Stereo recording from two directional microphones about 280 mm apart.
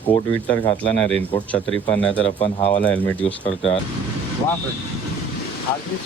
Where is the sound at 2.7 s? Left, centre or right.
Centre.